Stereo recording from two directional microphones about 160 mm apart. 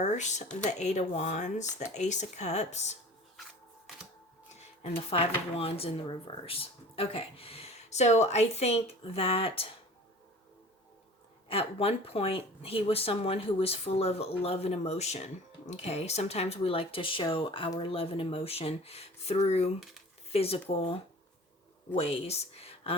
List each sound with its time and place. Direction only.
0.0 s speech: 45° left (ahead or behind)
3.9 s camera: centre (ahead or behind)
4.8 s speech: 40° left (ahead or behind)
11.4 s speech: 35° left (ahead or behind)
21.9 s speech: 40° left (ahead or behind)